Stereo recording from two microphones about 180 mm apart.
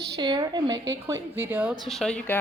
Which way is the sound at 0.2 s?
25° right (ahead or behind).